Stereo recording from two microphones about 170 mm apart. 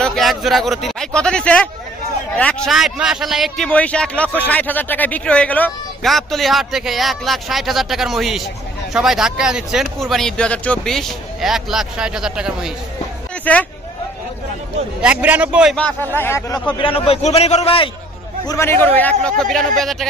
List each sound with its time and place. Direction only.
0.0 s a man's voice: centre (ahead or behind)
13.5 s speech: 10° left (ahead or behind)
15.0 s a man's voice: 5° right (ahead or behind)
15.7 s speech: 10° left (ahead or behind)
16.7 s a man's voice: 30° left (ahead or behind)
18.5 s a man's voice: 15° left (ahead or behind)